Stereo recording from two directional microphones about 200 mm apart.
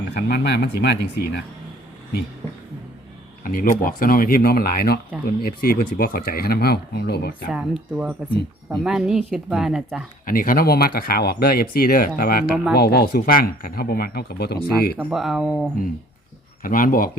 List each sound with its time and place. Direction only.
0.1 s speech: 55° left (ahead or behind)
3.4 s speech: 45° left (ahead or behind)
7.4 s speech: 5° right (ahead or behind)
10.2 s speech: 45° left (ahead or behind)
14.9 s speech: centre (ahead or behind)
16.6 s speech: 45° left (ahead or behind)